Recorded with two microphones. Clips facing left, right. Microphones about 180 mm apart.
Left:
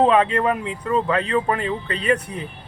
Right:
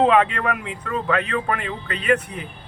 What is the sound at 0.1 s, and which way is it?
Speech, 35° left (ahead or behind).